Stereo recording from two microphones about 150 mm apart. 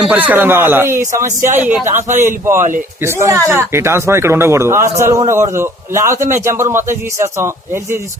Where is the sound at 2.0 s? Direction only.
55° right (ahead or behind).